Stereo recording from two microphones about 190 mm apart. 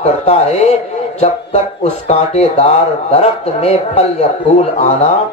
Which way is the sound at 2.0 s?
35° left (ahead or behind).